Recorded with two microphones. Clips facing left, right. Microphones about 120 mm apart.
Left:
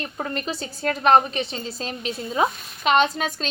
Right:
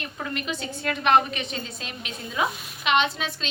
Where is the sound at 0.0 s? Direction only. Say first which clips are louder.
Left 3 dB; 35° left (ahead or behind).